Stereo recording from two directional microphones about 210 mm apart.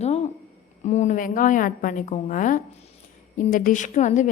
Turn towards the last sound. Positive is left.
turn(degrees=35)  # may be behind; listen again after turning